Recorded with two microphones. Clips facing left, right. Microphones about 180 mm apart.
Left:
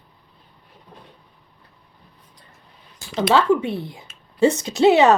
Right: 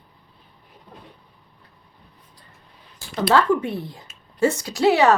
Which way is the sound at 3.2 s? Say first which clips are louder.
Left 1 dB; 25° left (ahead or behind).